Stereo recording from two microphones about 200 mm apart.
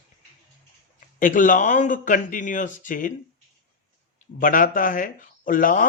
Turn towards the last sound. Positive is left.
turn(degrees=45)  # may be behind; listen again after turning